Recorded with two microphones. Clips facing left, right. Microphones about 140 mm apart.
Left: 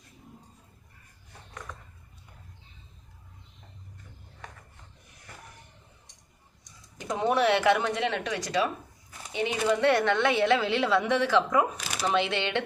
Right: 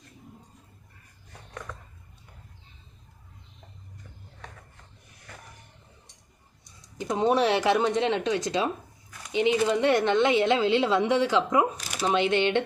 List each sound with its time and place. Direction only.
7.0 s speech: 20° right (ahead or behind)